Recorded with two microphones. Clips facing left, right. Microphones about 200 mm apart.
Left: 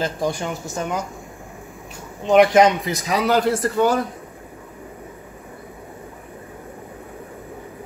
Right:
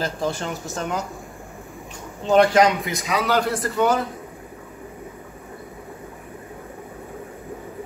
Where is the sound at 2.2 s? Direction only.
15° left (ahead or behind).